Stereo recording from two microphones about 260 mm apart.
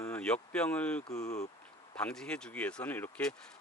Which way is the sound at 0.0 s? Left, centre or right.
Centre.